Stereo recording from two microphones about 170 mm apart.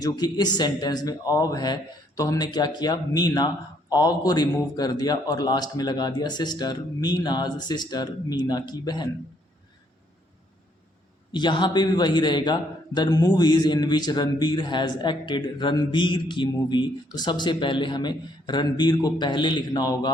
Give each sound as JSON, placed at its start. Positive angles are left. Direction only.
{"t": 0.0, "sound": "a man's voice", "side_deg": 25}
{"t": 11.3, "sound": "a man's voice", "side_deg": 25}